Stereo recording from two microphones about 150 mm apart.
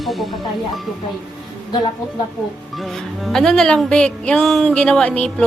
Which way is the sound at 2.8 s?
Centre (ahead or behind).